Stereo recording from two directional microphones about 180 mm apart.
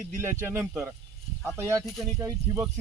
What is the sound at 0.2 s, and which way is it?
Speech, 15° right (ahead or behind).